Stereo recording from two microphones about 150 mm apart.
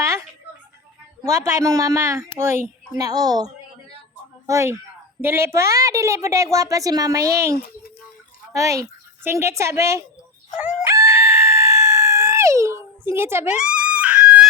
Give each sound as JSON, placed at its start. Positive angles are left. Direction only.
{"t": 0.0, "sound": "a sound", "side_deg": -20}
{"t": 1.2, "sound": "a woman's voice", "side_deg": -20}
{"t": 8.5, "sound": "speech", "side_deg": -20}
{"t": 10.6, "sound": "chicken", "side_deg": -5}
{"t": 10.8, "sound": "screaming", "side_deg": -15}